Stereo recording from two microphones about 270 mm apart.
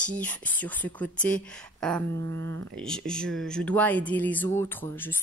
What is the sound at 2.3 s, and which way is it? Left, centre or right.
Speech, right.